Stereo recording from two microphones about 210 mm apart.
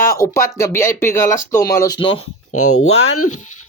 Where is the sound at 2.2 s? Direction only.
90° left.